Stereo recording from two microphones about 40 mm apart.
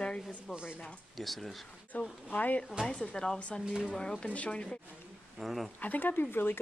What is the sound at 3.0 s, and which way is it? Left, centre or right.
Speech, centre.